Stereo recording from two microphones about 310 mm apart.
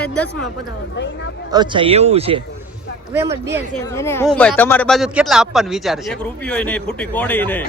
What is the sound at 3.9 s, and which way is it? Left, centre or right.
Speech, centre.